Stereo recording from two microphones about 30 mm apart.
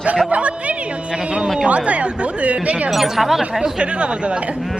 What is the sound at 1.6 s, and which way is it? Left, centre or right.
Speech, right.